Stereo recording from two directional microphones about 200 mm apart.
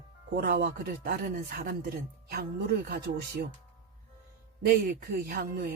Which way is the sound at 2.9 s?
50° right (ahead or behind).